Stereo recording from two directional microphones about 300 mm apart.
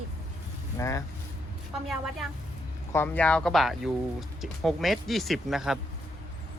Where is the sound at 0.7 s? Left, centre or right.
Centre.